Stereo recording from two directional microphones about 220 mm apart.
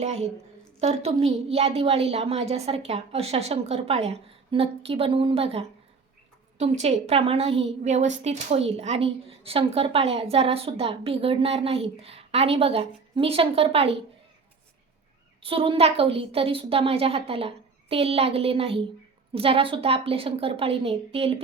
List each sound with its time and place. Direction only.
0.0 s a woman's voice: 30° right (ahead or behind)
15.4 s a woman's voice: 25° right (ahead or behind)